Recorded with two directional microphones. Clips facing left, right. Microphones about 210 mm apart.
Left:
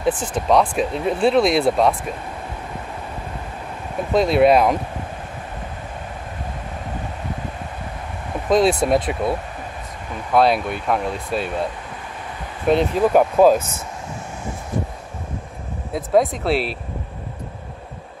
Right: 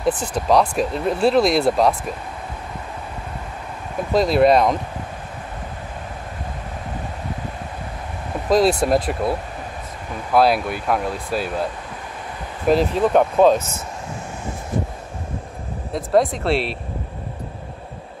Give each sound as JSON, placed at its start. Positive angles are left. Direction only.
{"t": 0.1, "sound": "speech", "side_deg": -40}
{"t": 0.5, "sound": "speech", "side_deg": 0}
{"t": 4.1, "sound": "speech", "side_deg": 0}
{"t": 8.5, "sound": "speech", "side_deg": 0}
{"t": 12.6, "sound": "speech", "side_deg": 0}
{"t": 15.9, "sound": "speech", "side_deg": 0}